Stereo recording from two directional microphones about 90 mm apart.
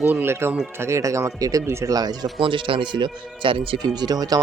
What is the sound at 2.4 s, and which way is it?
Speech, 70° right (ahead or behind).